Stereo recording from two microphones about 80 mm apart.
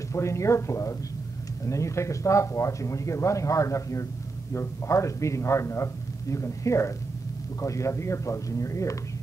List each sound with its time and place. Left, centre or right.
0.1 s speech: left